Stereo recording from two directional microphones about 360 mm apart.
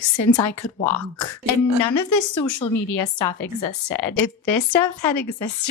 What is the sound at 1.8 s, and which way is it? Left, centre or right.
A woman's voice, left.